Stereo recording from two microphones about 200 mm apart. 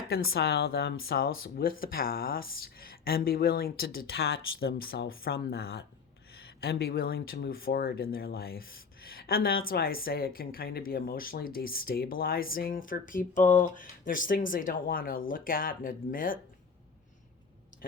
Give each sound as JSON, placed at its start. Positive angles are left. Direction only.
{"t": 0.3, "sound": "speech", "side_deg": 50}